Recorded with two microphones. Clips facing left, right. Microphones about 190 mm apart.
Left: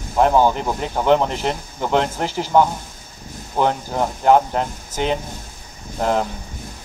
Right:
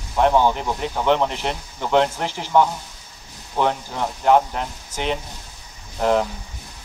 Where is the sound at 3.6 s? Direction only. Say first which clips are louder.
Left 3 dB; 40° left (ahead or behind).